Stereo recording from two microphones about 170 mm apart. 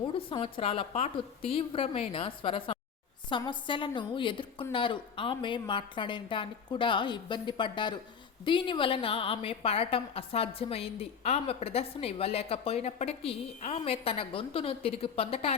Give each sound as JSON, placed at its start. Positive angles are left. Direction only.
{"t": 0.1, "sound": "a woman's voice", "side_deg": 30}